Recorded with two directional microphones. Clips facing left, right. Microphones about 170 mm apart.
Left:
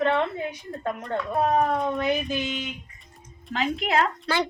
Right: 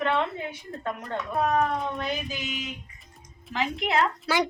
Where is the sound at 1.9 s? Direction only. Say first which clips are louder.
Left 6 dB; 55° left (ahead or behind).